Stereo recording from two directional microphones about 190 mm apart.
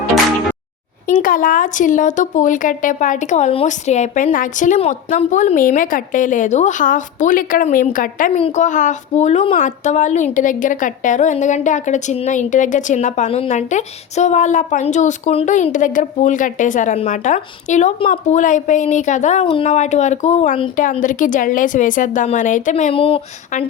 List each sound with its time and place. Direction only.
1.0 s speech: 45° left (ahead or behind)
8.4 s speech: 35° left (ahead or behind)